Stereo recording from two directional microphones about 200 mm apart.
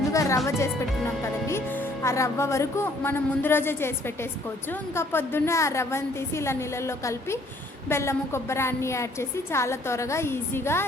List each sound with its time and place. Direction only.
0.1 s music: 15° left (ahead or behind)
0.4 s speech: 15° left (ahead or behind)